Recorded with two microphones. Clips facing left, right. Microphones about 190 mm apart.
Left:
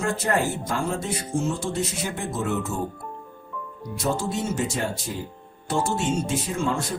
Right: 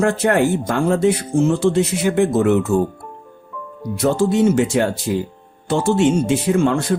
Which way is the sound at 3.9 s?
70° right (ahead or behind).